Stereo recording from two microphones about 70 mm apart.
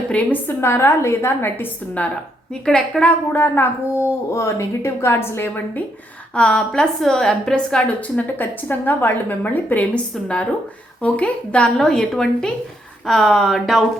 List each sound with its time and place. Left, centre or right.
0.1 s a woman's voice: left
0.6 s a woman's voice: left
2.5 s speech: centre
3.3 s a woman's voice: left
6.3 s speech: centre
8.0 s a woman's voice: left; by 13.8 s centre